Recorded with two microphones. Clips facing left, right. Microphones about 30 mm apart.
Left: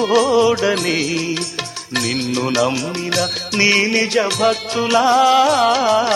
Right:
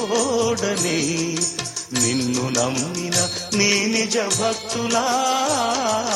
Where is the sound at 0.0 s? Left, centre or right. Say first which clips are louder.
Left 7 dB; left.